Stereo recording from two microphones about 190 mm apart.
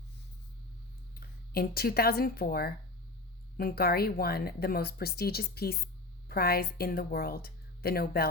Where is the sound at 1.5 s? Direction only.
55° left (ahead or behind).